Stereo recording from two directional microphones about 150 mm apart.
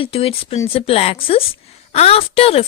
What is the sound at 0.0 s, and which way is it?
A woman's voice, 40° left (ahead or behind).